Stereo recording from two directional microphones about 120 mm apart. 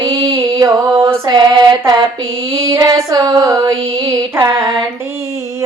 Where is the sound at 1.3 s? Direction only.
35° right (ahead or behind).